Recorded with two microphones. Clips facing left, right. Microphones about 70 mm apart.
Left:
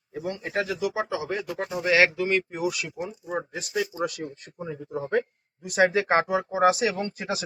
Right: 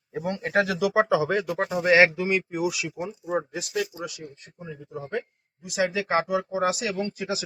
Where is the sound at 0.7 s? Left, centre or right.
Right.